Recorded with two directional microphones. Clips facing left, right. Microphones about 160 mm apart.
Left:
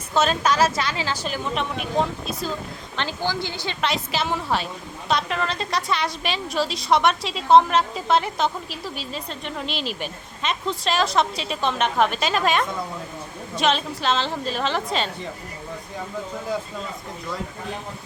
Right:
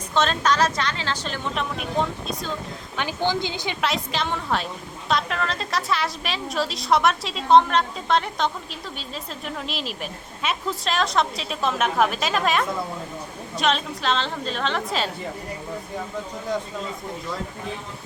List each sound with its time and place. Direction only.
0.1 s a woman's voice: 10° left (ahead or behind)
3.0 s a woman's voice: 15° right (ahead or behind)
3.8 s a woman's voice: centre (ahead or behind)